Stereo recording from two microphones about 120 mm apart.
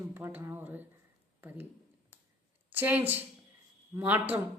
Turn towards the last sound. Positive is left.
turn(degrees=-15)  # may be behind; listen again after turning